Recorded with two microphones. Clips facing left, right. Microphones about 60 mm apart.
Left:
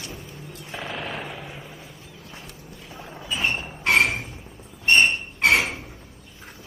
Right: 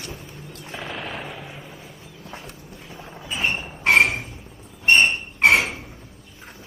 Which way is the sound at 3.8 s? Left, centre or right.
Centre.